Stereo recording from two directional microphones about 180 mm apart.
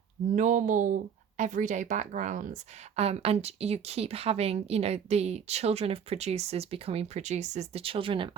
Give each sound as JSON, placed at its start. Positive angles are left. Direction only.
{"t": 0.3, "sound": "a woman's voice", "side_deg": -45}